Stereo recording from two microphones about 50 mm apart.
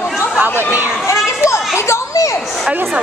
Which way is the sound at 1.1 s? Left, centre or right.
Left.